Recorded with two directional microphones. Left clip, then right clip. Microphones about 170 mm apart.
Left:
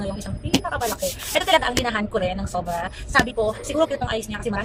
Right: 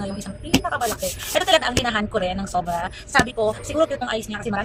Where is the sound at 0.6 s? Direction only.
Centre (ahead or behind).